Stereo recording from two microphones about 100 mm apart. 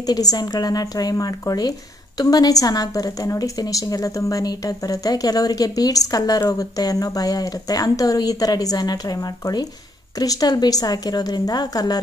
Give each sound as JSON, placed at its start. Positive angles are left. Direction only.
{"t": 0.0, "sound": "speech", "side_deg": 40}